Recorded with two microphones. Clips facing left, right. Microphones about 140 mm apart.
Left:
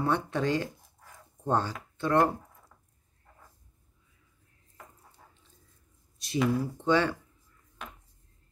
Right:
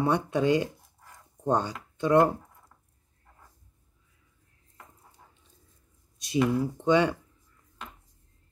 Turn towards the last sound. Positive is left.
turn(degrees=-15)  # may be behind; listen again after turning